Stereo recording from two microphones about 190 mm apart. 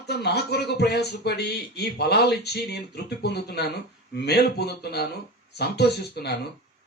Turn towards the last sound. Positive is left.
turn(degrees=60)  # may be behind; listen again after turning